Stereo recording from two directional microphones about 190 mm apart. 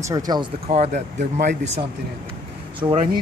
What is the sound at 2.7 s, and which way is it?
Speech, 25° right (ahead or behind).